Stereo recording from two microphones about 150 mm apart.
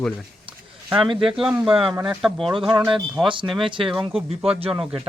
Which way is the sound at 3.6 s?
35° right (ahead or behind).